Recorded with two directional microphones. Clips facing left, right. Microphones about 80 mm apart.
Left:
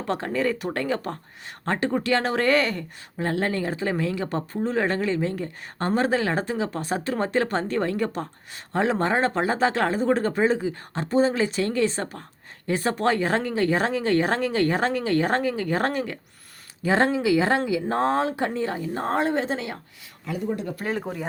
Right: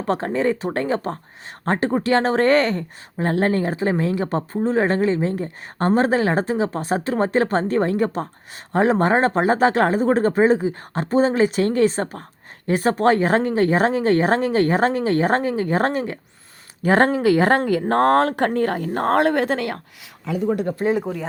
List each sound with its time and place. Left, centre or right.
0.0 s speech: right
16.8 s speech: right
20.7 s speech: right
21.0 s speech: centre